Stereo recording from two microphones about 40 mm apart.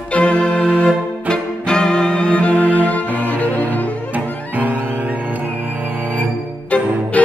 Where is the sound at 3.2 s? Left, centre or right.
Left.